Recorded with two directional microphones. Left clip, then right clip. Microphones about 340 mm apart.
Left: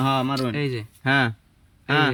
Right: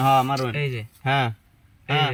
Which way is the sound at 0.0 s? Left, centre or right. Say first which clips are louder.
Right 4 dB; centre.